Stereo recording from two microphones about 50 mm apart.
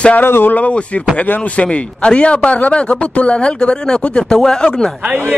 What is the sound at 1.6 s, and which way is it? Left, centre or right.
A man's voice, left.